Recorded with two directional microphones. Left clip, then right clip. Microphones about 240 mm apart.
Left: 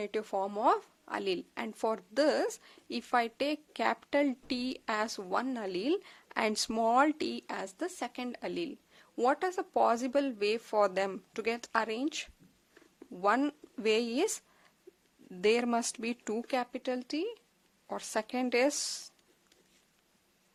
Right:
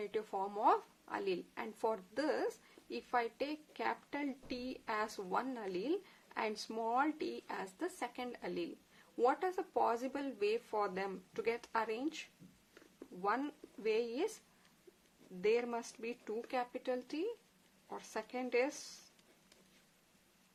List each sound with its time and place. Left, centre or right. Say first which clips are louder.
0.0 s a woman's voice: left 6 dB; left
15.4 s speech: left 6 dB; left